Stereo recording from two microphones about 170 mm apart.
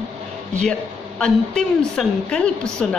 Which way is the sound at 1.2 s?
5° left (ahead or behind).